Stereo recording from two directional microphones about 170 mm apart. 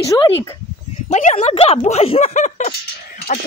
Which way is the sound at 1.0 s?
40° left (ahead or behind).